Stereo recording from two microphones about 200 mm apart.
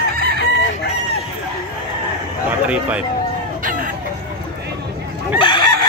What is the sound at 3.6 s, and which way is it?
Chicken, 45° right (ahead or behind).